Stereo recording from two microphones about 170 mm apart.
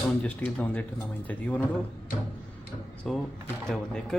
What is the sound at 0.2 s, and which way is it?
Speech, 10° left (ahead or behind).